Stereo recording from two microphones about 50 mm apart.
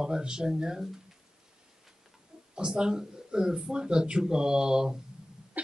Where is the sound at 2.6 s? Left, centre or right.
Centre.